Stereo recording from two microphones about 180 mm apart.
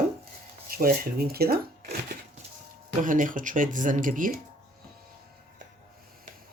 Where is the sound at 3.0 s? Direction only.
45° right (ahead or behind).